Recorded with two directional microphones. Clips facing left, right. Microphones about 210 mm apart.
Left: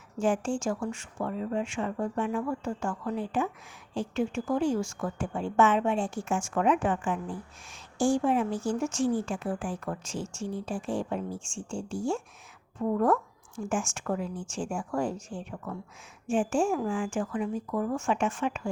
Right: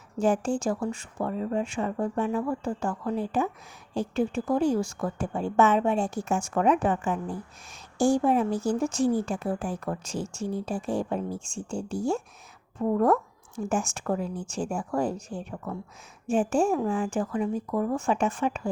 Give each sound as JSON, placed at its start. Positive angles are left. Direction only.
{"t": 0.2, "sound": "a woman's voice", "side_deg": -40}